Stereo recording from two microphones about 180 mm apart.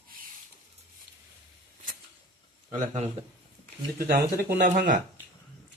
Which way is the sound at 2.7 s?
40° right (ahead or behind).